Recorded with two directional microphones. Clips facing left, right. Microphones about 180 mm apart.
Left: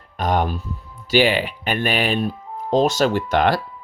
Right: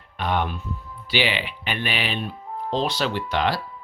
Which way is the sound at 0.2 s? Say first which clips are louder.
Left 4 dB; 40° left (ahead or behind).